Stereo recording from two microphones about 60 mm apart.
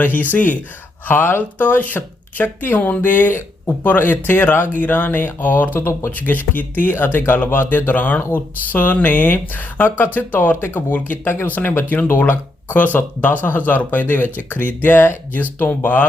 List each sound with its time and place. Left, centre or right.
0.0 s speech: left